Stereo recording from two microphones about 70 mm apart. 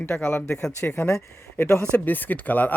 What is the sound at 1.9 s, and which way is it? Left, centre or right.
Speech, left.